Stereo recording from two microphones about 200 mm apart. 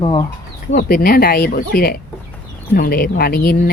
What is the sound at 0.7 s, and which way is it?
Speech, 50° left (ahead or behind).